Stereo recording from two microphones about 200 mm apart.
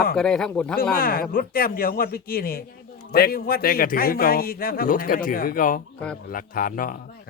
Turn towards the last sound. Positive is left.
turn(degrees=45)  # may be behind; listen again after turning